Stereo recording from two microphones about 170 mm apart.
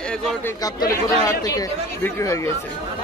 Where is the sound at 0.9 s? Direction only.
20° left (ahead or behind).